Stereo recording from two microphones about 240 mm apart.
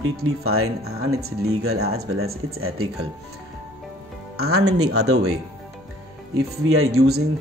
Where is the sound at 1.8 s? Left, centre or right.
Right.